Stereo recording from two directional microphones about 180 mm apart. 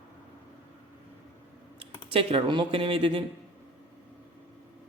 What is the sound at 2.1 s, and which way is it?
Speech, 30° right (ahead or behind).